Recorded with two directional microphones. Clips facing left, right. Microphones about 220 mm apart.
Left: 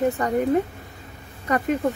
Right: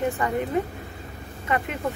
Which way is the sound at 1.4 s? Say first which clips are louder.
Left 5 dB; 40° left (ahead or behind).